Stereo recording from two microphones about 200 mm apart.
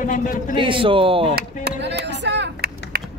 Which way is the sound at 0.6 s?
25° right (ahead or behind).